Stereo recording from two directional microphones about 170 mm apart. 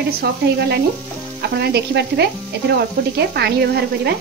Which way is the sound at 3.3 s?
75° right (ahead or behind).